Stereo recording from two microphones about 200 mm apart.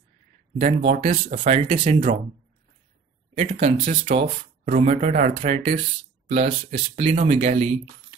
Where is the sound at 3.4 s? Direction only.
30° right (ahead or behind).